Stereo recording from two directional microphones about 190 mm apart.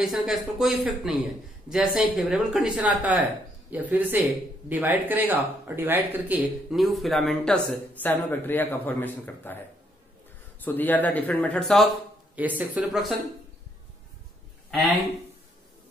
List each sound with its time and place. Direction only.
0.0 s a man's voice: centre (ahead or behind)
10.6 s a man's voice: 10° left (ahead or behind)
12.4 s speech: 10° right (ahead or behind)